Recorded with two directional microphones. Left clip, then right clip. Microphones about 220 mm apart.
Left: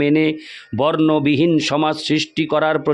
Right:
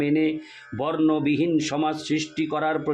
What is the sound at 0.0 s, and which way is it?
Speech, 50° left (ahead or behind).